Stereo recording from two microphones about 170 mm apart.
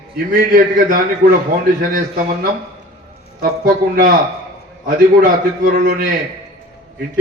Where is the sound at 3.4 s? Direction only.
60° right (ahead or behind).